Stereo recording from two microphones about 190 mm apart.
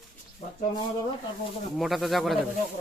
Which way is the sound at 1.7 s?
Centre (ahead or behind).